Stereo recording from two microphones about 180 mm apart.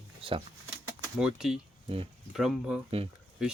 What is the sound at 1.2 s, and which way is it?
Speech, 5° right (ahead or behind).